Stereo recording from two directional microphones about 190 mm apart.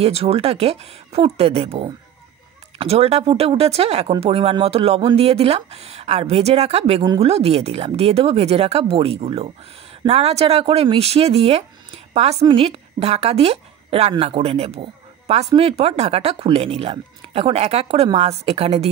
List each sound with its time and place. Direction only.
0.0 s a woman's voice: 30° right (ahead or behind)